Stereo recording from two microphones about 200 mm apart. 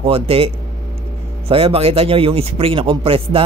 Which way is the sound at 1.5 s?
30° right (ahead or behind).